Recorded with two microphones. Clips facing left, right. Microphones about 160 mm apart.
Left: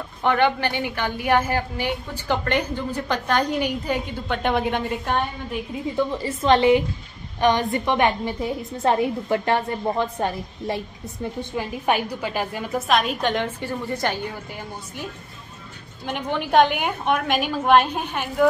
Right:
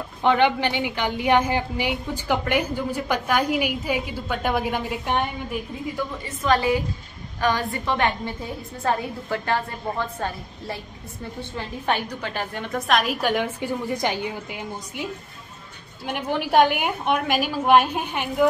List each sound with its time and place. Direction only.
0.2 s a woman's voice: 15° right (ahead or behind)
5.9 s a woman's voice: 30° left (ahead or behind); by 15.0 s 10° right (ahead or behind)
16.1 s a woman's voice: 10° right (ahead or behind)